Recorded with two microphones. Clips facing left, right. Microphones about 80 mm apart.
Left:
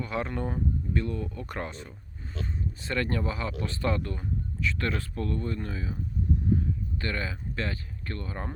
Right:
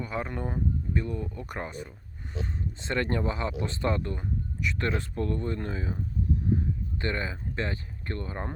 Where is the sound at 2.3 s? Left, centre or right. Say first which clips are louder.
Even; right.